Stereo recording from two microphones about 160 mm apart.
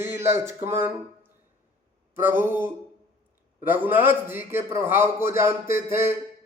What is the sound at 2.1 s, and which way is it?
A man's voice, 10° right (ahead or behind).